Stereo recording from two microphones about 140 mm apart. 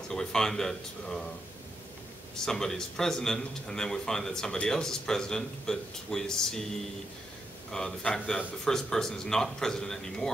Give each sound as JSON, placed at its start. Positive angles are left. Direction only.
{"t": 0.1, "sound": "speech", "side_deg": 5}
{"t": 2.4, "sound": "speech", "side_deg": 5}
{"t": 7.7, "sound": "speech", "side_deg": 5}